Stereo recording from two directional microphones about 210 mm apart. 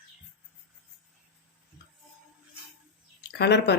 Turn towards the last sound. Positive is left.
turn(degrees=55)  # may be behind; listen again after turning